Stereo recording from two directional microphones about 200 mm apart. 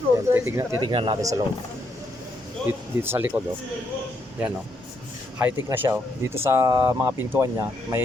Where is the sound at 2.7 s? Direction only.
10° right (ahead or behind).